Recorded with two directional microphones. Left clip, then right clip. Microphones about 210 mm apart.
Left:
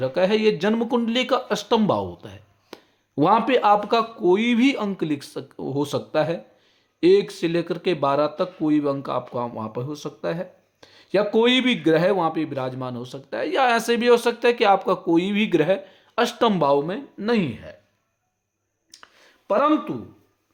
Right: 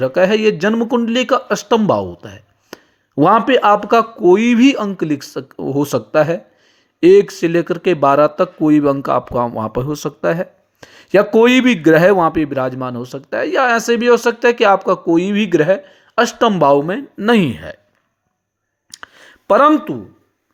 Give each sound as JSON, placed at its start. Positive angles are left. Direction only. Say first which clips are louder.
{"t": 0.0, "sound": "speech", "louder": "right 7 dB", "side_deg": -25}
{"t": 18.9, "sound": "a sound", "louder": "right 12 dB", "side_deg": -45}
{"t": 19.7, "sound": "speech", "louder": "right 6 dB", "side_deg": -30}